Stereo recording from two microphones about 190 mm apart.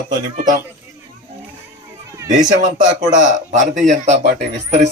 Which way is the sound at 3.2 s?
40° right (ahead or behind).